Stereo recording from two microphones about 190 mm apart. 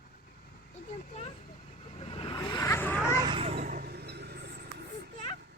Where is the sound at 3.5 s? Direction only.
45° right (ahead or behind); by 4.6 s 60° right (ahead or behind).